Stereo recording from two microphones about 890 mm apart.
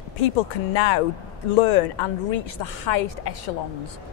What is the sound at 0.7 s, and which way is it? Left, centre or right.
A woman's voice, left.